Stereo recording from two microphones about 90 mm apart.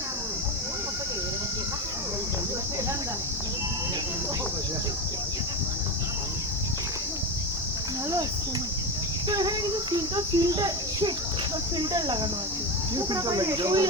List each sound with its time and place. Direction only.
9.3 s cricket: 45° right (ahead or behind)
11.8 s speech: 50° right (ahead or behind)